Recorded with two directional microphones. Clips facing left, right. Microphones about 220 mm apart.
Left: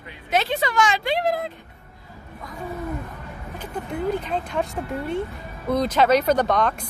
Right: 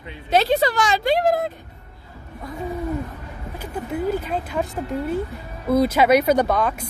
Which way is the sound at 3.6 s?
5° right (ahead or behind).